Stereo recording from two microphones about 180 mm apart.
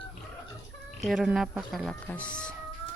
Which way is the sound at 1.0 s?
Centre (ahead or behind).